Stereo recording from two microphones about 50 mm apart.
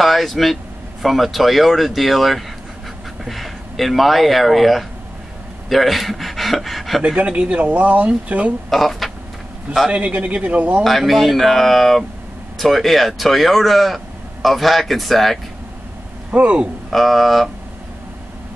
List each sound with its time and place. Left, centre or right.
0.0 s speech: centre
7.2 s speech: right
8.6 s speech: centre
9.8 s speech: right
10.8 s speech: centre
16.3 s speech: right
16.9 s speech: centre